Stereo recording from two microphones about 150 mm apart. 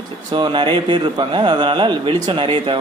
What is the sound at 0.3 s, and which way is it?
Speech, 30° right (ahead or behind).